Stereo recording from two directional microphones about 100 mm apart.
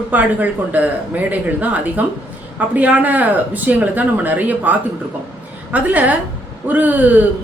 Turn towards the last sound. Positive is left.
turn(degrees=-15)  # may be behind; listen again after turning